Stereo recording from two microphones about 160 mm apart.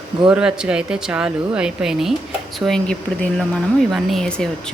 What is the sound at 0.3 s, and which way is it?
Speech, 5° right (ahead or behind).